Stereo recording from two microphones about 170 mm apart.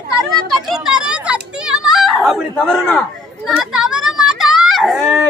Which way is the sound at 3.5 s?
Centre (ahead or behind).